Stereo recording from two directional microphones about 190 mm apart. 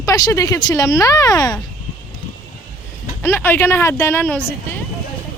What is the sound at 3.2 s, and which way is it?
Speech, 10° left (ahead or behind).